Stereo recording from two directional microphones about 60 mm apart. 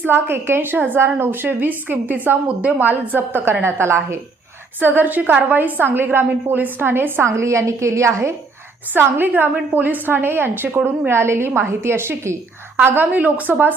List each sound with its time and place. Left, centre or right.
0.0 s a woman's voice: right
4.9 s a woman's voice: right
9.0 s a woman's voice: right
11.1 s a woman's voice: right
12.7 s a woman's voice: right